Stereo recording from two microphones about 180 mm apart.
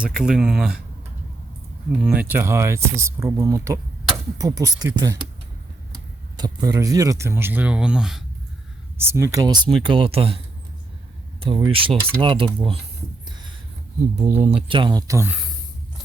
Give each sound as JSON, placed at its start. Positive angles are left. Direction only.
{"t": 0.0, "sound": "speech", "side_deg": -5}
{"t": 2.0, "sound": "speech", "side_deg": -5}
{"t": 6.3, "sound": "speech", "side_deg": -20}
{"t": 9.0, "sound": "speech", "side_deg": -15}
{"t": 14.2, "sound": "speech", "side_deg": -40}
{"t": 14.7, "sound": "speech", "side_deg": -25}